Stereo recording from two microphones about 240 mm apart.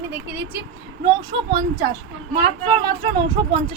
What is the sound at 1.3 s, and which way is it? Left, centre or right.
A woman's voice, centre.